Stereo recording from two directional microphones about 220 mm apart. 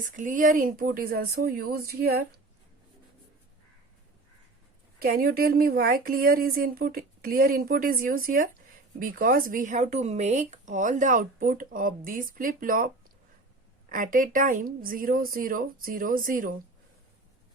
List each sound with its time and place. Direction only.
0.0 s speech: 35° right (ahead or behind)
4.9 s speech: 45° right (ahead or behind)
13.9 s speech: 40° right (ahead or behind)